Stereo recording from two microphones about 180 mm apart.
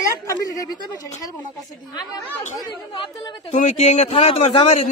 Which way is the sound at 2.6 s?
25° left (ahead or behind).